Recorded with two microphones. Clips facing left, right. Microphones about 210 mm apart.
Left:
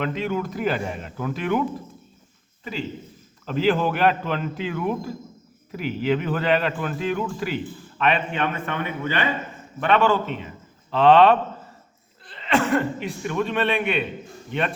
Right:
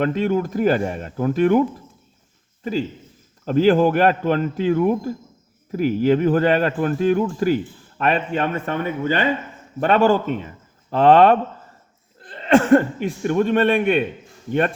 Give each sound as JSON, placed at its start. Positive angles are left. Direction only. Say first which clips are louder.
{"t": 0.0, "sound": "speech", "louder": "right 6 dB", "side_deg": -45}
{"t": 3.4, "sound": "speech", "louder": "right 6 dB", "side_deg": -45}